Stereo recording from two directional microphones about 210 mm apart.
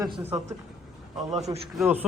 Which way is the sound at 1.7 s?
10° right (ahead or behind).